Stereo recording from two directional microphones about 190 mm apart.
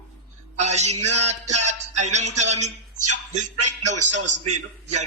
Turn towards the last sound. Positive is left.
turn(degrees=-35)  # may be behind; listen again after turning